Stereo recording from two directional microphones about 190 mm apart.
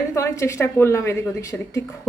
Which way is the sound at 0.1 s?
15° left (ahead or behind).